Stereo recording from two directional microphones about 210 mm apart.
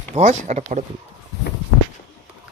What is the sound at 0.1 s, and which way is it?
Speech, 35° right (ahead or behind).